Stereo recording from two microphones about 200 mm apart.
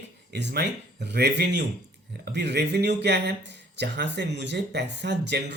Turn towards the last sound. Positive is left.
turn(degrees=-55)  # may be behind; listen again after turning